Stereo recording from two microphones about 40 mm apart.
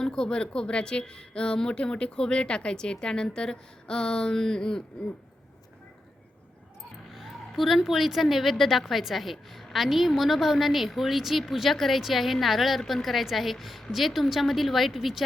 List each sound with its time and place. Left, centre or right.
0.0 s a woman's voice: centre
7.1 s a sound: centre
7.5 s a woman's voice: centre